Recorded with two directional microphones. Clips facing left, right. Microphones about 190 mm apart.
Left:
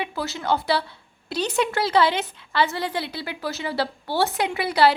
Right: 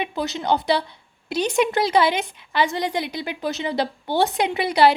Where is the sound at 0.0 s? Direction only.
20° right (ahead or behind).